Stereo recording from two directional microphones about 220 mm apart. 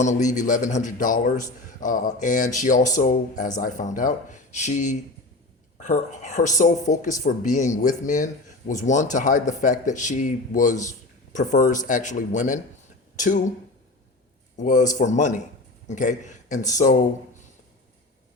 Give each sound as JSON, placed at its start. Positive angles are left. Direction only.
{"t": 0.0, "sound": "speech", "side_deg": 35}
{"t": 14.5, "sound": "speech", "side_deg": 35}